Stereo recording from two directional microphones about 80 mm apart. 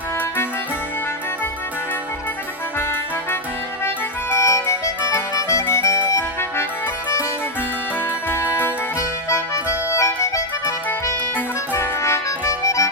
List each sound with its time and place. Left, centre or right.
3.8 s music: left
5.1 s accordion: left
6.1 s music: left
9.9 s music: left
11.7 s music: left